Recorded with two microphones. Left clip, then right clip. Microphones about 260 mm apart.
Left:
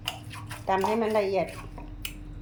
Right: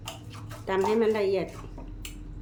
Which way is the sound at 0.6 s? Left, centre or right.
Centre.